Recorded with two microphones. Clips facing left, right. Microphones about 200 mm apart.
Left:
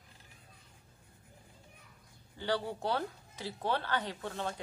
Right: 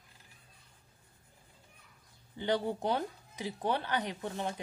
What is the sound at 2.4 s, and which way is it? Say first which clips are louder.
Speech: right 3 dB; 15° right (ahead or behind).